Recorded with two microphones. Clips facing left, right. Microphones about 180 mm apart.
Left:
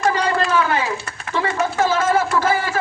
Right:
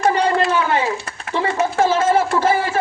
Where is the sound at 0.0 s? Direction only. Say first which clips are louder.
Right 3 dB; 25° right (ahead or behind).